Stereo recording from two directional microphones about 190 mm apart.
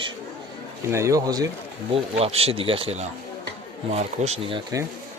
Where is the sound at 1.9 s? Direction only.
30° right (ahead or behind).